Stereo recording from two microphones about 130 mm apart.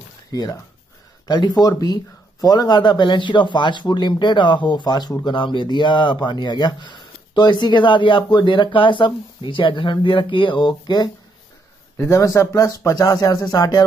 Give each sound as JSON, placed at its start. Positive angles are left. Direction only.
{"t": 0.3, "sound": "speech", "side_deg": 30}